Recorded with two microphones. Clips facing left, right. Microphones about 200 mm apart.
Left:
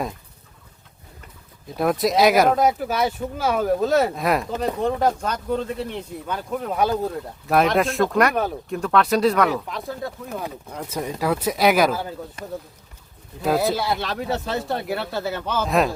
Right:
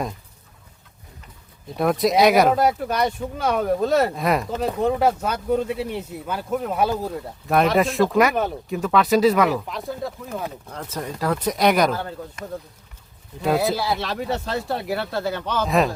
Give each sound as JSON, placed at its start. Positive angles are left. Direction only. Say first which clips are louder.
{"t": 1.7, "sound": "speech", "louder": "right 1 dB", "side_deg": 0}
{"t": 10.8, "sound": "speech", "louder": "left 2 dB", "side_deg": 10}
{"t": 12.4, "sound": "speech", "louder": "even", "side_deg": 35}
{"t": 13.4, "sound": "speech", "louder": "even", "side_deg": 0}